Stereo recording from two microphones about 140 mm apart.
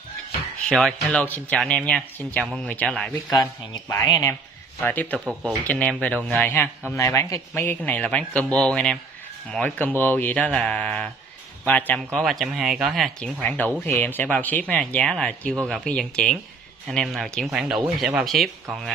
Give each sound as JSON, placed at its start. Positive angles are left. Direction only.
{"t": 0.7, "sound": "speech", "side_deg": 0}
{"t": 3.9, "sound": "speech", "side_deg": 25}
{"t": 4.8, "sound": "speech", "side_deg": 10}